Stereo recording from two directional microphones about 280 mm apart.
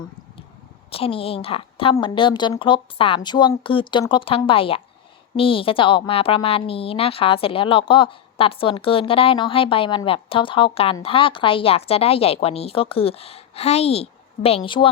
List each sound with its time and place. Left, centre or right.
0.9 s a woman's voice: centre